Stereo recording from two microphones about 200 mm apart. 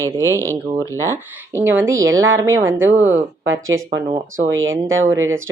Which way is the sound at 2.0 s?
80° right.